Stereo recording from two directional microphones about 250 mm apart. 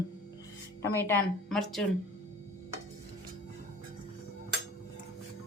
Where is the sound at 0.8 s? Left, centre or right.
Centre.